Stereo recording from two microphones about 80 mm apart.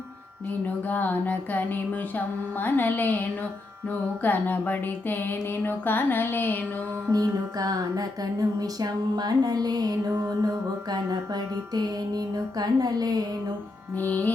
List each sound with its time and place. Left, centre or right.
0.9 s music: left
7.1 s music: right
10.1 s music: right
13.9 s music: left